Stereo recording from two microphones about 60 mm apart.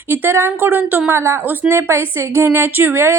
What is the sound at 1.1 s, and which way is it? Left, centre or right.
A woman's voice, right.